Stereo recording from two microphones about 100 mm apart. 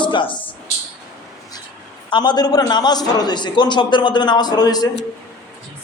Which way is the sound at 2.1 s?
45° left (ahead or behind).